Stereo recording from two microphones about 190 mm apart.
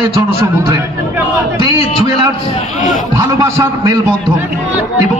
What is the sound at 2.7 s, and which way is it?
Speech, 45° left (ahead or behind).